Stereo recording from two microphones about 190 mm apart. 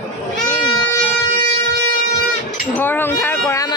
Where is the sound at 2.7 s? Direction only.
10° left (ahead or behind).